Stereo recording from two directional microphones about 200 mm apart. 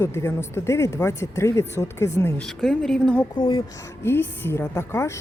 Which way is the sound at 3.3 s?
25° left (ahead or behind).